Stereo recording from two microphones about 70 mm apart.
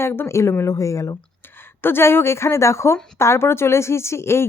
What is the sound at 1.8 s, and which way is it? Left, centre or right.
A woman's voice, left.